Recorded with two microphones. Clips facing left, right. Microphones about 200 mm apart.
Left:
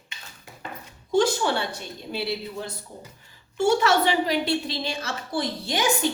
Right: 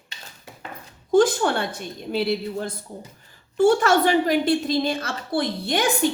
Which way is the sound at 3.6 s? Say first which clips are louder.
Right 3 dB; 50° right (ahead or behind).